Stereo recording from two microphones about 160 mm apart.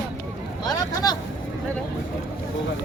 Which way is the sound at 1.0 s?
20° left (ahead or behind).